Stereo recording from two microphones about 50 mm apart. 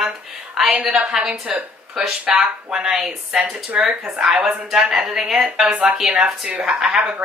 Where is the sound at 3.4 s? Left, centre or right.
Right.